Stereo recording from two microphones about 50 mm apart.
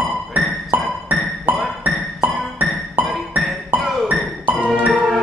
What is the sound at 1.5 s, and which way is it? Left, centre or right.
Music, right.